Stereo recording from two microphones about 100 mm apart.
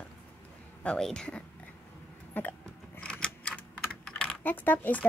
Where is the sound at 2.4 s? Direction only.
15° left (ahead or behind).